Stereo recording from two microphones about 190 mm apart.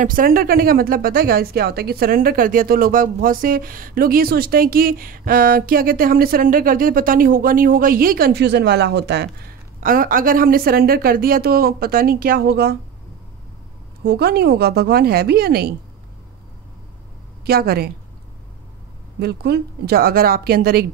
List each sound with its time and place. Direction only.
0.0 s speech: 45° right (ahead or behind); by 9.3 s 60° right (ahead or behind)
9.8 s speech: 45° right (ahead or behind)
14.0 s a woman's voice: 55° right (ahead or behind)
17.5 s a woman's voice: 55° right (ahead or behind)
19.1 s a woman's voice: 55° right (ahead or behind)